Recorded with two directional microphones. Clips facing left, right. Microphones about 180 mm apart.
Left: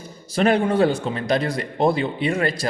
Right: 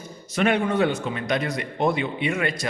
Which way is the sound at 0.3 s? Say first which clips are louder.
Left 3 dB; 35° left (ahead or behind).